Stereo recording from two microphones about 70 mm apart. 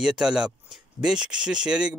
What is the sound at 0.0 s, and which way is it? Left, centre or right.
Speech, centre.